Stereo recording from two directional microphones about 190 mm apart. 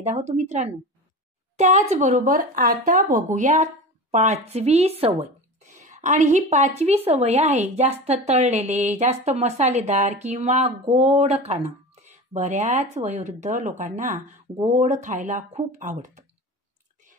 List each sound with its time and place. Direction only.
0.0 s a woman's voice: 35° right (ahead or behind)